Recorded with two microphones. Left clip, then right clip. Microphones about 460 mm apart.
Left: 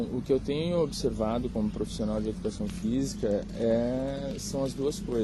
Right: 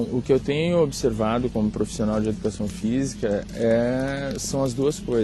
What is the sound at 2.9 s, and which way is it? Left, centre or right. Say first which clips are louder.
Speech: right 4 dB; right.